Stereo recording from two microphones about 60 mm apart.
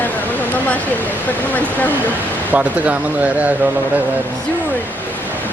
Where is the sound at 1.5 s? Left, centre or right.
Left.